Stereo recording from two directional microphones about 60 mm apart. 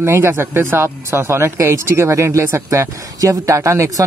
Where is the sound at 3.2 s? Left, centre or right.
Right.